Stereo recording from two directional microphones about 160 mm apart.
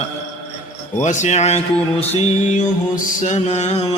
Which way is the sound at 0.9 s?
50° left (ahead or behind).